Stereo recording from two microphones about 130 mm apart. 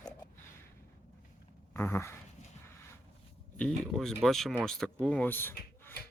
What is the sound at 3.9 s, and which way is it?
Speech, centre (ahead or behind).